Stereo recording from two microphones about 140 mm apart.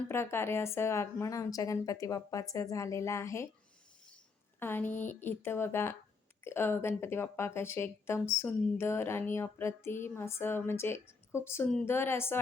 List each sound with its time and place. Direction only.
0.1 s speech: 15° left (ahead or behind)
4.6 s speech: 15° left (ahead or behind)